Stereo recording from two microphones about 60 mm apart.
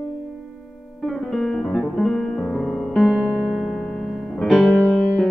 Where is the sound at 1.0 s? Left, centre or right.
Centre.